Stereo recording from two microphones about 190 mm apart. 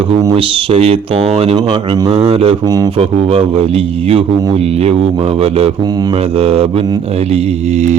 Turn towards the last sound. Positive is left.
turn(degrees=-35)  # may be behind; listen again after turning